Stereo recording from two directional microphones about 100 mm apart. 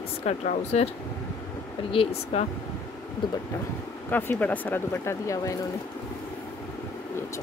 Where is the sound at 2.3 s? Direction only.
90° left.